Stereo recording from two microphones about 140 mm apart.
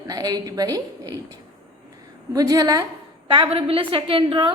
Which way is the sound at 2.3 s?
25° right (ahead or behind).